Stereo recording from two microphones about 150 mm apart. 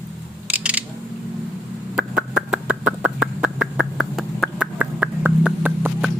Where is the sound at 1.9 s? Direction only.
5° right (ahead or behind).